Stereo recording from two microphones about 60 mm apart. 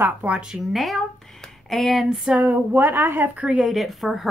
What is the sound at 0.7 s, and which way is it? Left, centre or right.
Speech, centre.